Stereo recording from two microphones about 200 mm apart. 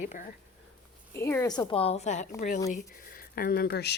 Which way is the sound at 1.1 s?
10° left (ahead or behind).